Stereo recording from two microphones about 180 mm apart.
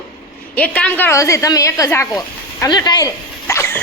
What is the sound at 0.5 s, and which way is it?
Speech, 5° left (ahead or behind).